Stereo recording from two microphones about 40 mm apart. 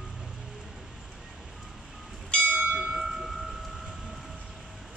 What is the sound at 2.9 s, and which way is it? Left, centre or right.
Train, centre.